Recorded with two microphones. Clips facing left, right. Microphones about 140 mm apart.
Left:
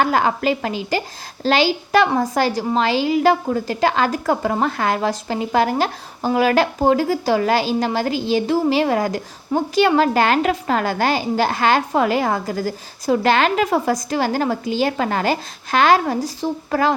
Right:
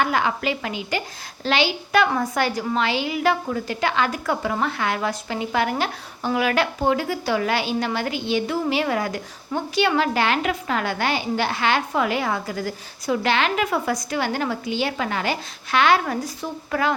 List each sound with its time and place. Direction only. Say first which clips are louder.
0.0 s a woman's voice: left 4 dB; 40° left (ahead or behind)